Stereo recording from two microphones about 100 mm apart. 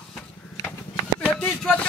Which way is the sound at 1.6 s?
10° left (ahead or behind).